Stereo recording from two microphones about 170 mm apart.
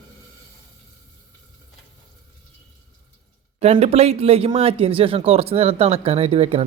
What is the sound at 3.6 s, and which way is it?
Speech, 40° right (ahead or behind).